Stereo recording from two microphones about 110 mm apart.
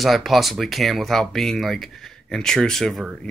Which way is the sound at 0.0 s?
Centre (ahead or behind).